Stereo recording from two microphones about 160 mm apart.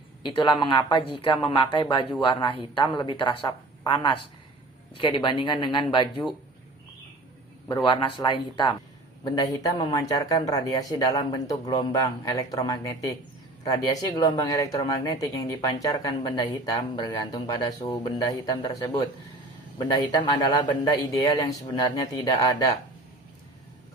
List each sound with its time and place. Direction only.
0.3 s speech: 30° left (ahead or behind)
7.9 s speech: 30° left (ahead or behind)
19.9 s speech: 25° left (ahead or behind)